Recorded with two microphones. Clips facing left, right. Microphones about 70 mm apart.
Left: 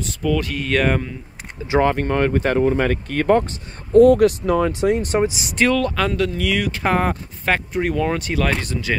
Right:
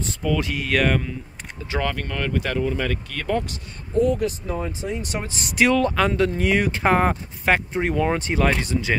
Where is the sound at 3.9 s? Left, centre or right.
Left.